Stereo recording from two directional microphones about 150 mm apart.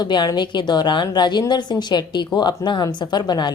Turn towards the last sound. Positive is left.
turn(degrees=30)  # may be behind; listen again after turning